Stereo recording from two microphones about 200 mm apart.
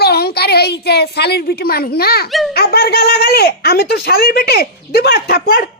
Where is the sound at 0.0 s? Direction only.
50° left (ahead or behind).